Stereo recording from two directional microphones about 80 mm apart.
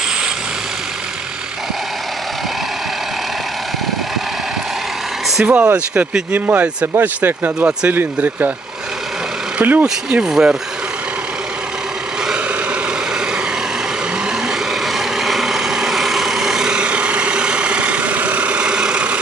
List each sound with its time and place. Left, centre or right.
5.4 s speech: centre
5.7 s speech: right
9.6 s speech: right
14.9 s vehicle: centre